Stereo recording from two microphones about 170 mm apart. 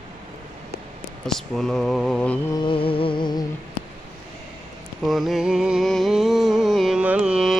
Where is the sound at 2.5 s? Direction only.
30° left (ahead or behind).